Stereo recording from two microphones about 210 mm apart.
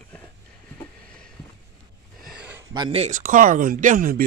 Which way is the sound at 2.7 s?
25° right (ahead or behind).